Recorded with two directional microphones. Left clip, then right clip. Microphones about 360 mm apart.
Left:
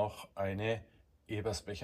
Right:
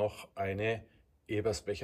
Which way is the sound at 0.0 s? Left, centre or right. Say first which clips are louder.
Right 2 dB; centre.